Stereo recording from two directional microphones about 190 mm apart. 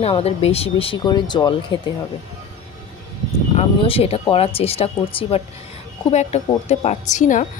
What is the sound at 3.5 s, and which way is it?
Speech, 30° left (ahead or behind).